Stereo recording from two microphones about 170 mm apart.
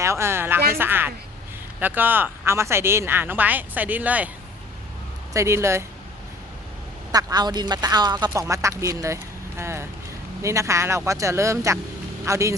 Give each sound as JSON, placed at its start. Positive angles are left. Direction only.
{"t": 0.0, "sound": "a woman's voice", "side_deg": -15}
{"t": 5.3, "sound": "speech", "side_deg": -15}
{"t": 7.1, "sound": "speech", "side_deg": -20}